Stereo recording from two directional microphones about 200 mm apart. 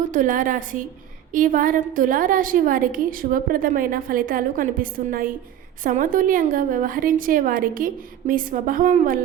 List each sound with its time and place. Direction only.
0.1 s a woman's voice: 40° right (ahead or behind)